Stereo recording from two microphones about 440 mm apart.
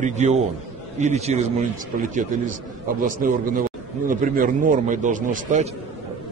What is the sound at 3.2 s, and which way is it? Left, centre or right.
A man's voice, centre.